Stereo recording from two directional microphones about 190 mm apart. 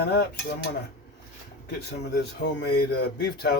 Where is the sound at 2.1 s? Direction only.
65° left (ahead or behind).